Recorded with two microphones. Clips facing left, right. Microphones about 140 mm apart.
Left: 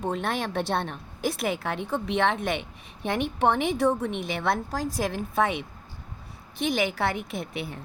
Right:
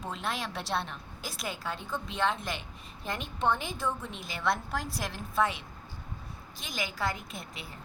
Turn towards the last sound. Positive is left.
turn(degrees=65)  # may be behind; listen again after turning